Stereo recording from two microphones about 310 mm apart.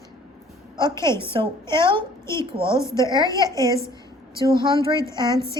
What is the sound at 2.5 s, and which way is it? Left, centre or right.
Speech, centre.